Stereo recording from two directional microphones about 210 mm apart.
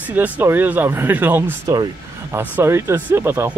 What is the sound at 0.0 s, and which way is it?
Speech, 10° right (ahead or behind).